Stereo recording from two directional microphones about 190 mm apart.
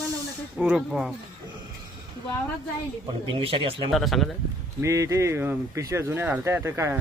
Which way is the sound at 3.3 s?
30° right (ahead or behind).